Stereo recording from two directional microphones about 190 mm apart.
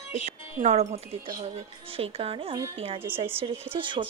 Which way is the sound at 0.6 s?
35° right (ahead or behind).